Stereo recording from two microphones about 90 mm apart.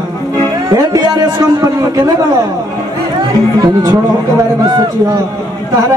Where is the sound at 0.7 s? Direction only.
40° right (ahead or behind).